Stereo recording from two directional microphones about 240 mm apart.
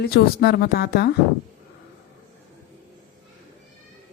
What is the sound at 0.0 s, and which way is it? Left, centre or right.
Speech, left.